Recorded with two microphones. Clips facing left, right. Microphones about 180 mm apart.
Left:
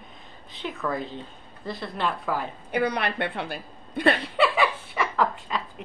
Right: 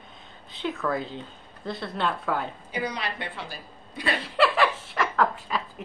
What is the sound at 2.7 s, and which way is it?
A woman's voice, 60° left (ahead or behind).